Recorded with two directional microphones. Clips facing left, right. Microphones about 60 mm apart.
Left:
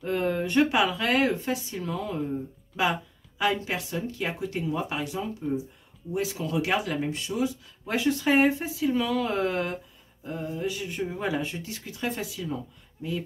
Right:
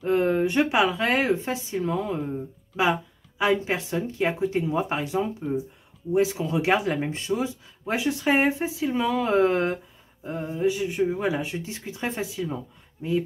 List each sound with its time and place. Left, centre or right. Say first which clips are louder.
0.1 s speech: right 4 dB; centre
11.7 s speech: right 1 dB; right